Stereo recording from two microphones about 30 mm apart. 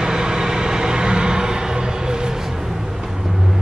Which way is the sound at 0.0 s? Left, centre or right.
Right.